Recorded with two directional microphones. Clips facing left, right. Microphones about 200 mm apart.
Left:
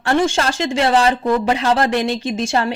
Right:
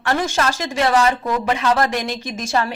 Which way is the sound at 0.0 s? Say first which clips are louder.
Left 3 dB; 30° left (ahead or behind).